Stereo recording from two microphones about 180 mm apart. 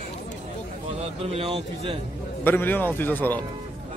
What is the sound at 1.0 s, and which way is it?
A man's voice, 35° right (ahead or behind).